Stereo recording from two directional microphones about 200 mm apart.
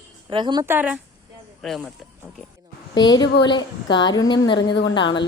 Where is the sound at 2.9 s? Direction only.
20° left (ahead or behind).